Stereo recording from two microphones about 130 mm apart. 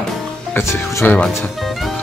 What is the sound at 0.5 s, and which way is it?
Speech, 20° left (ahead or behind).